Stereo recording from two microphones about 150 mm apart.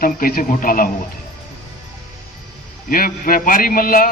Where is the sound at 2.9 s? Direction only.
70° left (ahead or behind).